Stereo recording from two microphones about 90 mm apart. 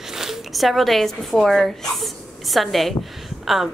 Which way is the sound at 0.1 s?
5° right (ahead or behind).